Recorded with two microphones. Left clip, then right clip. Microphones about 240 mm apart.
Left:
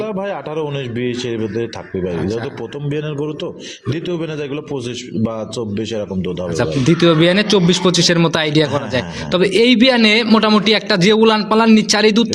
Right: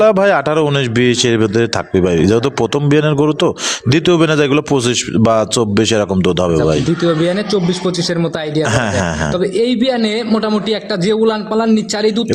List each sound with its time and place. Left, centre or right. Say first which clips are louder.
0.0 s speech: right 12 dB; right
2.9 s speech: right 8 dB; right
6.6 s a man's voice: right 1 dB; centre